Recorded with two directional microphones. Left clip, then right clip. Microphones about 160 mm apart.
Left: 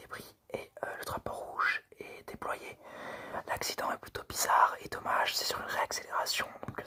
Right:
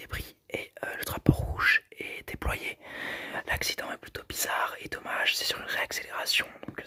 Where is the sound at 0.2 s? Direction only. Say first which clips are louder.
Right 5 dB; 20° right (ahead or behind).